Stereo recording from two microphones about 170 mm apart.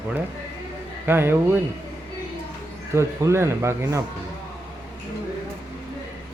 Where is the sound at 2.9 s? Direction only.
15° right (ahead or behind).